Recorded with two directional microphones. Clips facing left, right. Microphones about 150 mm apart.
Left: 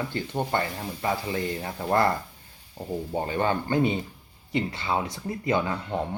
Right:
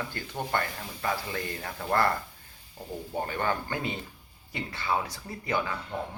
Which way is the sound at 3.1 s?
20° left (ahead or behind).